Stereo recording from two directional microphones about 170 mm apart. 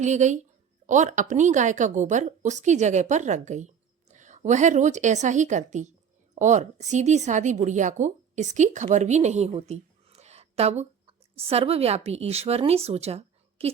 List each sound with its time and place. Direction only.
0.0 s a woman's voice: 45° right (ahead or behind)